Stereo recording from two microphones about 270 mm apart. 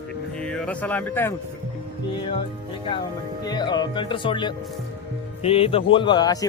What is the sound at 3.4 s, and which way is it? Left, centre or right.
Speech, centre.